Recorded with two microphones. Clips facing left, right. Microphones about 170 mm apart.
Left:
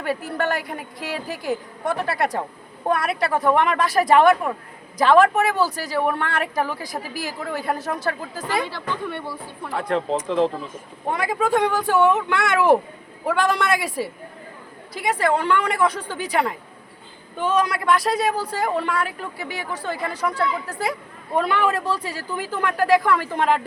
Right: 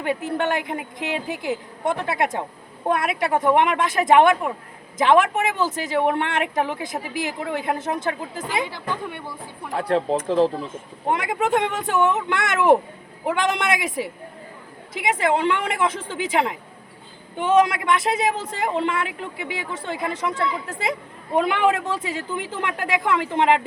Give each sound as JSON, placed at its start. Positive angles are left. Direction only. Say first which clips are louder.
{"t": 0.0, "sound": "speech", "louder": "right 1 dB", "side_deg": -20}
{"t": 9.7, "sound": "speech", "louder": "right 2 dB", "side_deg": -35}
{"t": 11.1, "sound": "speech", "louder": "even", "side_deg": -20}